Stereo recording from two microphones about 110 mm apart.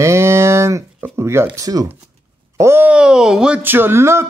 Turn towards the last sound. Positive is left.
turn(degrees=-25)  # may be behind; listen again after turning